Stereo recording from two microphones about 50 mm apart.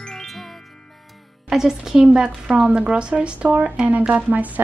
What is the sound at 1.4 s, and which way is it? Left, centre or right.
A woman's voice, centre.